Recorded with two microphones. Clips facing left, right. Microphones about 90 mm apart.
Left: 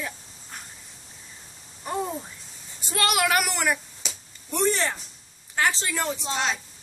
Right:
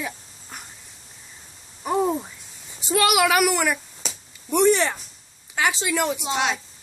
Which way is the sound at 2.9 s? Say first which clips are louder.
Right 4 dB; 10° right (ahead or behind).